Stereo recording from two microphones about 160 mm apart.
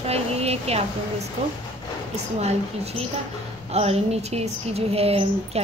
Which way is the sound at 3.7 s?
40° right (ahead or behind).